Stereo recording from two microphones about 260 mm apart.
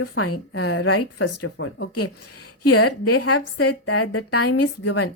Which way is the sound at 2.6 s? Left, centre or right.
Left.